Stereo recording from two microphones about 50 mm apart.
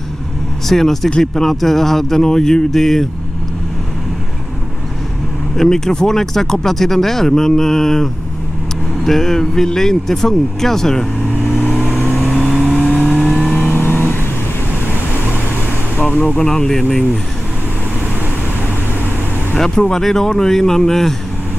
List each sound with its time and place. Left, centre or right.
0.7 s speech: centre
5.6 s speech: centre
12.4 s vehicle: centre
12.9 s vehicle: left
13.7 s vehicle: left
16.0 s vehicle: left
16.3 s speech: centre
19.5 s speech: centre